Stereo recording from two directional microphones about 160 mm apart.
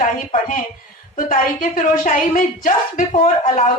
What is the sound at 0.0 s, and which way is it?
A woman's voice, 55° left (ahead or behind).